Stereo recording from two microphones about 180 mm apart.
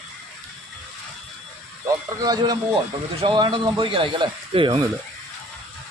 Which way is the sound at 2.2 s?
20° right (ahead or behind).